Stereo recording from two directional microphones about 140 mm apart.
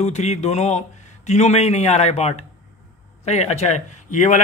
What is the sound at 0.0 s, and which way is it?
A man's voice, 55° left (ahead or behind).